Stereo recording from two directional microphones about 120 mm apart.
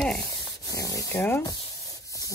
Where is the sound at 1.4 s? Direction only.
30° left (ahead or behind).